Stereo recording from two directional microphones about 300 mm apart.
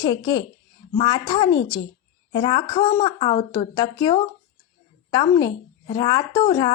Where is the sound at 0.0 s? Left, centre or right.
Centre.